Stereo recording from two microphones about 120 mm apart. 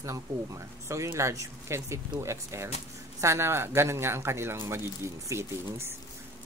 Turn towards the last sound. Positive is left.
turn(degrees=-20)  # may be behind; listen again after turning